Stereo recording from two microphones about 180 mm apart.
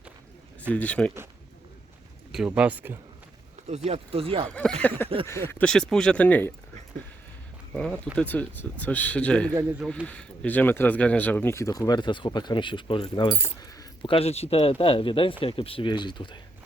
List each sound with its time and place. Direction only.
0.7 s speech: 5° left (ahead or behind)
2.3 s speech: 5° right (ahead or behind)
3.8 s speech: 35° right (ahead or behind)
4.4 s speech: 5° left (ahead or behind)
7.7 s speech: 5° left (ahead or behind); by 16.4 s 25° left (ahead or behind)